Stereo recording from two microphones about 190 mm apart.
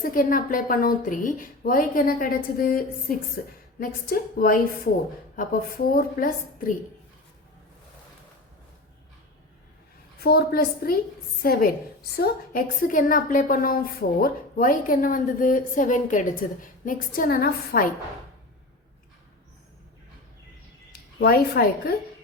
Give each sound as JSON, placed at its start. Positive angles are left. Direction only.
{"t": 0.0, "sound": "a woman's voice", "side_deg": 45}
{"t": 10.2, "sound": "a woman's voice", "side_deg": 55}
{"t": 21.2, "sound": "a woman's voice", "side_deg": 55}